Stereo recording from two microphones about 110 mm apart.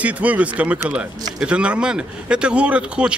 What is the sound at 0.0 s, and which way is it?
Speech, 10° right (ahead or behind).